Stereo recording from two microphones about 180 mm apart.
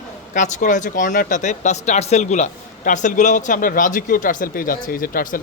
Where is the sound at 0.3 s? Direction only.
40° left (ahead or behind).